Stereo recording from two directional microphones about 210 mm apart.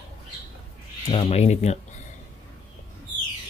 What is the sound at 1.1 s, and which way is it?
Speech, 30° left (ahead or behind).